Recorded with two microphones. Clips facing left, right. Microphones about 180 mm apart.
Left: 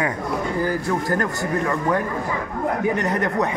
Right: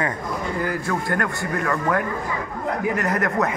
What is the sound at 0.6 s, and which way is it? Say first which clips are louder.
Speech: left 2 dB; 30° left (ahead or behind).